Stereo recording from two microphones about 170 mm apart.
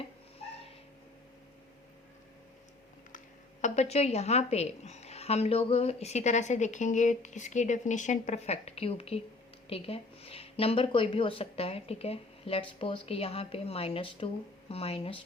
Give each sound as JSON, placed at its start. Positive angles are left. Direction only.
{"t": 3.6, "sound": "a woman's voice", "side_deg": 40}